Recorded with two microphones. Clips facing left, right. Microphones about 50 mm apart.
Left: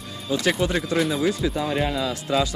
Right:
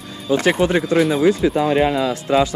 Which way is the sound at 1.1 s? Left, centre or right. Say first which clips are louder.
Right 7 dB; right.